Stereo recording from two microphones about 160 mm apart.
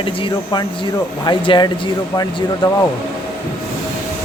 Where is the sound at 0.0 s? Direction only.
35° left (ahead or behind).